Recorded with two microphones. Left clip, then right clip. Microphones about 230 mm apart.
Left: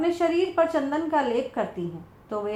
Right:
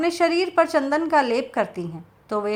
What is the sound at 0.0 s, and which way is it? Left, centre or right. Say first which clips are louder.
A woman's voice: right 3 dB; right.